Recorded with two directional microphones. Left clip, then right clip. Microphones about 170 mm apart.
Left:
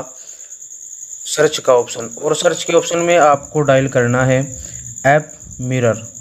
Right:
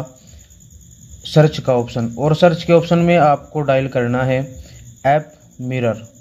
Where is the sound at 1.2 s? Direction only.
20° left (ahead or behind).